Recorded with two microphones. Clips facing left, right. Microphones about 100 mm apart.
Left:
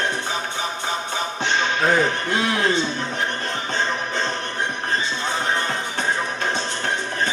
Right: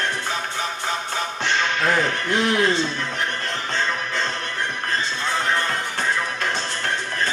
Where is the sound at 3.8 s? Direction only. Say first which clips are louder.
Left 1 dB; 20° left (ahead or behind).